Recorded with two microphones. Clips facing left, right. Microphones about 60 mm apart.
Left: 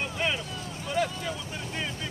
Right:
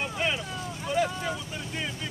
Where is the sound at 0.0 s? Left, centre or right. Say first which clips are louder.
Even; centre.